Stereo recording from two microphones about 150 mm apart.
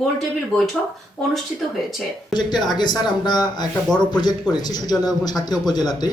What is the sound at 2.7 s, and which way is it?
A man's voice, 30° left (ahead or behind).